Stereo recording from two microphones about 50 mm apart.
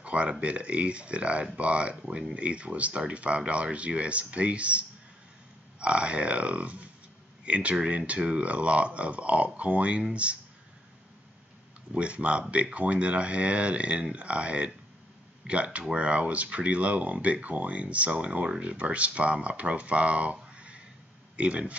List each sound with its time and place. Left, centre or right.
0.0 s speech: right
11.9 s speech: right